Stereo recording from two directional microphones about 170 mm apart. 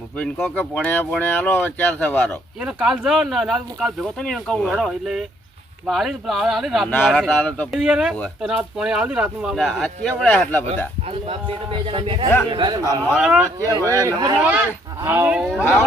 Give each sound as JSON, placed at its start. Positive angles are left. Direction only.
{"t": 0.2, "sound": "speech", "side_deg": 5}
{"t": 2.6, "sound": "speech", "side_deg": -5}
{"t": 11.3, "sound": "a man's voice", "side_deg": -30}
{"t": 13.1, "sound": "speech", "side_deg": -5}
{"t": 13.7, "sound": "a man's voice", "side_deg": -20}
{"t": 14.3, "sound": "speech", "side_deg": -10}